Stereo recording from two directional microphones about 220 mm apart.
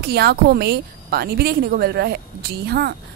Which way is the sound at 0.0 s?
45° right (ahead or behind).